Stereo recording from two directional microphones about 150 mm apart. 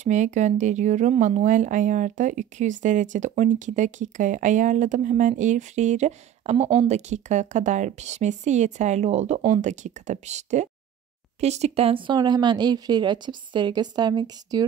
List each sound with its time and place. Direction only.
0.0 s speech: 55° right (ahead or behind); by 14.7 s 25° right (ahead or behind)